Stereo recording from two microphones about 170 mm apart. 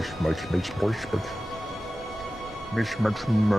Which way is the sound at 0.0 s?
Centre (ahead or behind).